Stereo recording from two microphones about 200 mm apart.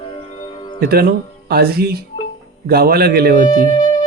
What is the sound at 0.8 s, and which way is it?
A man's voice, 50° right (ahead or behind).